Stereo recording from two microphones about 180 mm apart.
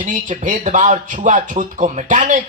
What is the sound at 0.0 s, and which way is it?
Speech, 45° right (ahead or behind).